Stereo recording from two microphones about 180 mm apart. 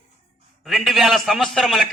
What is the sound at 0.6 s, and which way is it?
A man's voice, centre (ahead or behind).